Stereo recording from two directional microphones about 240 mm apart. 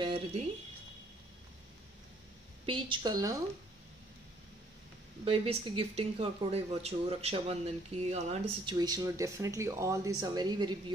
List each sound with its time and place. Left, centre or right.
0.0 s speech: right
2.6 s a woman's voice: right
5.2 s speech: right